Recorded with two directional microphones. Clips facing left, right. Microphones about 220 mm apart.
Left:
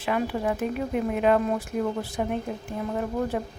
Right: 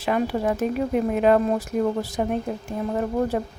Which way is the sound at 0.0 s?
40° right (ahead or behind).